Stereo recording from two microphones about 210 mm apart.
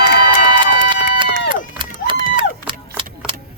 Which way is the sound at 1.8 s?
25° right (ahead or behind).